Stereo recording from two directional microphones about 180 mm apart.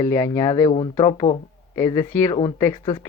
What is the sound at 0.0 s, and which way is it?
Speech, 15° left (ahead or behind).